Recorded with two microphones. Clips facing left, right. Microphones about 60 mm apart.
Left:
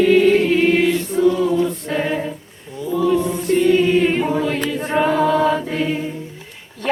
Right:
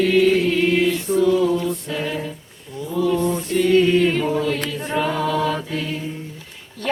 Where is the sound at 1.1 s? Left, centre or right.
Centre.